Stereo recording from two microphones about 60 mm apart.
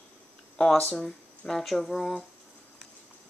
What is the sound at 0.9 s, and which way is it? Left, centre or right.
Speech, centre.